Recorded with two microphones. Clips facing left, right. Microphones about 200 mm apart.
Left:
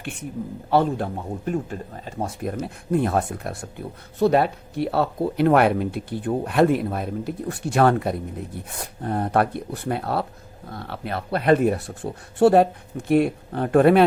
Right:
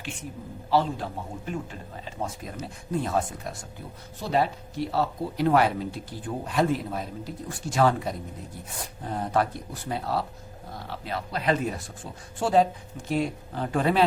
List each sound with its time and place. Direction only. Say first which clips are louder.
0.7 s a man's voice: left 4 dB; 55° left (ahead or behind)